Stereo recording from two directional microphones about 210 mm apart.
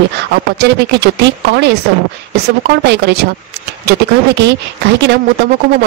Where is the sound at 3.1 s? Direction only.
55° right (ahead or behind).